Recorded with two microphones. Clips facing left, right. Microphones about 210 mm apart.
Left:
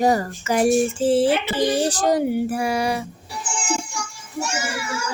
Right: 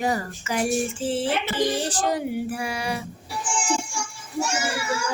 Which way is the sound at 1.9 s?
40° left (ahead or behind).